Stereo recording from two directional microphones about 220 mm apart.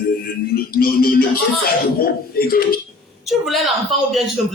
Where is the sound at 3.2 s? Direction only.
Centre (ahead or behind).